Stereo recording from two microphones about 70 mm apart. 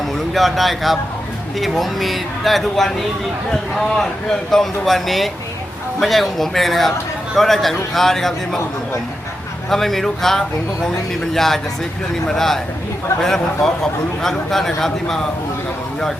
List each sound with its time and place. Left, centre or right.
0.3 s speech: centre
9.6 s a man's voice: centre